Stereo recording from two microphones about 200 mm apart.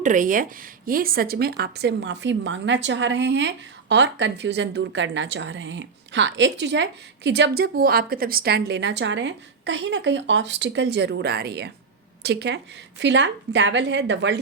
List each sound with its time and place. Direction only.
0.0 s speech: 40° right (ahead or behind); by 14.3 s 65° right (ahead or behind)